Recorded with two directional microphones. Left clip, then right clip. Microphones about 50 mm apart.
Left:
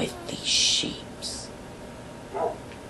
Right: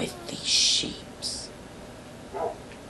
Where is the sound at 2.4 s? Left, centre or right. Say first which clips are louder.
Left 3 dB; right.